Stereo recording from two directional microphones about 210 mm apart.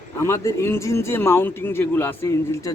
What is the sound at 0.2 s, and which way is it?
A man's voice, 15° left (ahead or behind).